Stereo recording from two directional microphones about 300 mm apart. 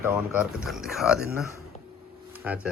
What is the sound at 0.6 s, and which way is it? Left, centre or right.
Speech, centre.